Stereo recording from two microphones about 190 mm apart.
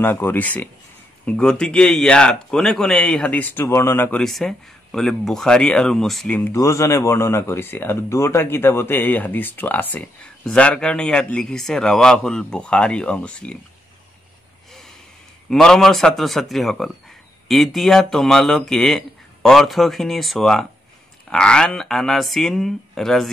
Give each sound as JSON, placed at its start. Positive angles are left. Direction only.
{"t": 0.0, "sound": "speech", "side_deg": 10}
{"t": 15.5, "sound": "speech", "side_deg": 5}